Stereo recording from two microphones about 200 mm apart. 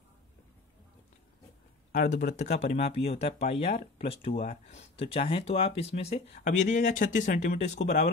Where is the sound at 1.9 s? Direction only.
40° left (ahead or behind).